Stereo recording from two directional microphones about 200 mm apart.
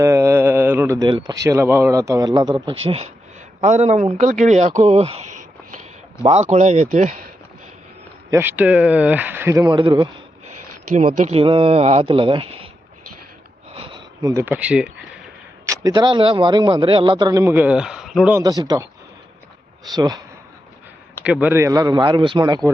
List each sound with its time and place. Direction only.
0.0 s speech: 15° right (ahead or behind)
3.6 s speech: 35° right (ahead or behind)
6.2 s speech: 35° right (ahead or behind)
8.3 s speech: 10° right (ahead or behind)
10.9 s speech: 35° right (ahead or behind)
13.7 s a sound: 25° right (ahead or behind); by 15.7 s 5° right (ahead or behind)
15.7 s speech: 20° right (ahead or behind); by 18.3 s centre (ahead or behind)
18.3 s speech: 20° right (ahead or behind)
19.9 s speech: 20° right (ahead or behind)
21.2 s speech: 10° right (ahead or behind)